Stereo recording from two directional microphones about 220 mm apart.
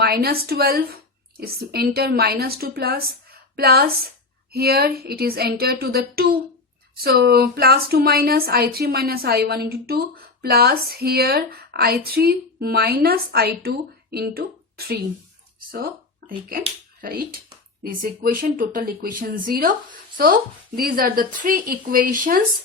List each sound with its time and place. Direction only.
0.0 s a woman's voice: 45° right (ahead or behind)